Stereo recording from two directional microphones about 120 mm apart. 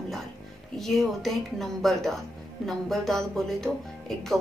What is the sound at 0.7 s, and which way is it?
A woman's voice, centre (ahead or behind).